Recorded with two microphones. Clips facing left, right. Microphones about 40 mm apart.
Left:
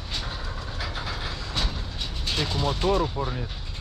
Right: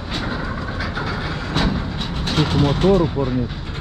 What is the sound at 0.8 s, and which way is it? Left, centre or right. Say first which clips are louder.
Train: right 6 dB; centre.